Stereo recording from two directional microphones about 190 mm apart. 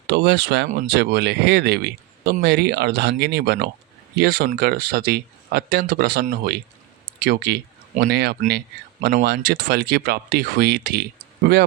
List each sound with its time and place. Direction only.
0.1 s speech: 55° right (ahead or behind)
0.7 s speech: 45° right (ahead or behind)
0.9 s speech: 60° right (ahead or behind)